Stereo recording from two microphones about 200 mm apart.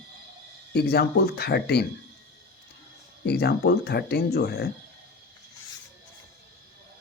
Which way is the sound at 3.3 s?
55° left (ahead or behind).